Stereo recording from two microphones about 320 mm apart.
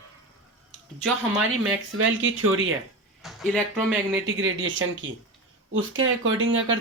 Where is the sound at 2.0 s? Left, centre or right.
Right.